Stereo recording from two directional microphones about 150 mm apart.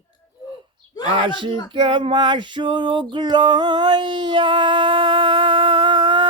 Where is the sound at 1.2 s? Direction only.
30° right (ahead or behind).